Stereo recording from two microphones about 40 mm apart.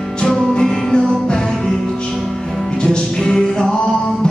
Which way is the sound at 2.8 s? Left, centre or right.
Centre.